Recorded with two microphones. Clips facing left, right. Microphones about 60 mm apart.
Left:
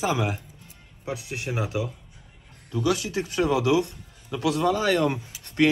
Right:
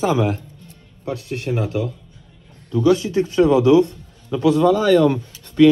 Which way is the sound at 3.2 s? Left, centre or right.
Centre.